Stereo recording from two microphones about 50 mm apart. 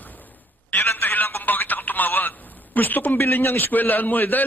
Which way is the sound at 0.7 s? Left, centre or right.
Left.